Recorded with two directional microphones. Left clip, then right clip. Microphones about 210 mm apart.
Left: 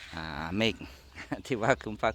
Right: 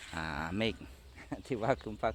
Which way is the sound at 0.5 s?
25° left (ahead or behind).